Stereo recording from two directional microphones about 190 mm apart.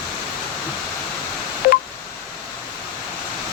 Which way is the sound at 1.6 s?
50° left (ahead or behind).